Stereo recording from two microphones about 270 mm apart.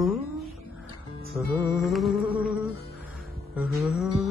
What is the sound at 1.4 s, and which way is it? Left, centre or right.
Music, centre.